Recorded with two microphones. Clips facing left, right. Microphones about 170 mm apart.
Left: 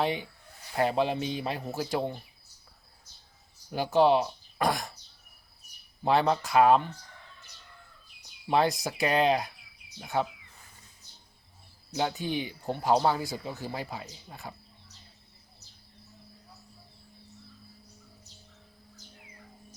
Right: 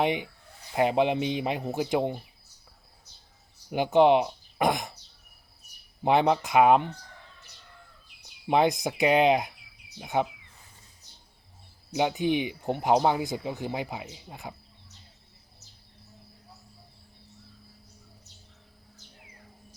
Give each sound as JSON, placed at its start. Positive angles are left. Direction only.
{"t": 0.0, "sound": "speech", "side_deg": -20}
{"t": 3.7, "sound": "speech", "side_deg": -15}
{"t": 6.0, "sound": "speech", "side_deg": -20}
{"t": 8.4, "sound": "speech", "side_deg": -20}
{"t": 11.9, "sound": "speech", "side_deg": -15}